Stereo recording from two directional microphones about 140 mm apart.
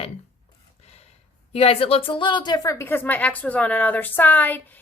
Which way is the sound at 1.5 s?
45° left (ahead or behind).